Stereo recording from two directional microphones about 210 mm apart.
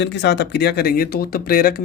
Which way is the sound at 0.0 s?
55° left (ahead or behind).